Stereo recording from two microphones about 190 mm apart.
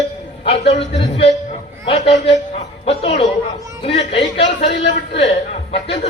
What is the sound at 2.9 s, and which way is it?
Chatter, 30° left (ahead or behind).